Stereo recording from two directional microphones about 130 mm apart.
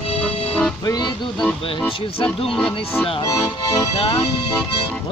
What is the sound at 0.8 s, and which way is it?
Music, 30° left (ahead or behind).